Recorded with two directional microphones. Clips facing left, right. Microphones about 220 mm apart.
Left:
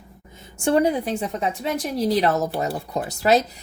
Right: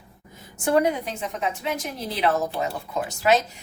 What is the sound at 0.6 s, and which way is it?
A woman's voice, 30° left (ahead or behind).